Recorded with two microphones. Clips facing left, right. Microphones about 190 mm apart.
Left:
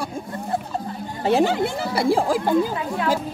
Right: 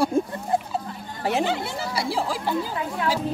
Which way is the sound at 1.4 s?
50° left (ahead or behind).